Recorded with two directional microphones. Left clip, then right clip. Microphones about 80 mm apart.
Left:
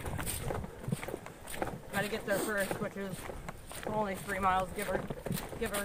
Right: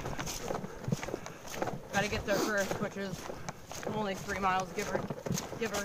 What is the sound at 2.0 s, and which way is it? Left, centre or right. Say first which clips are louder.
Speech: right 2 dB; left.